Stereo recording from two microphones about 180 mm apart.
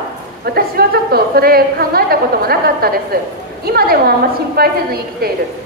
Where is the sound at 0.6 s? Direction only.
60° right (ahead or behind).